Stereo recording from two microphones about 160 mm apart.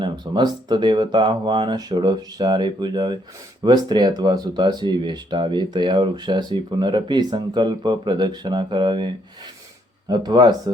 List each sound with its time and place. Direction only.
0.0 s speech: 25° right (ahead or behind)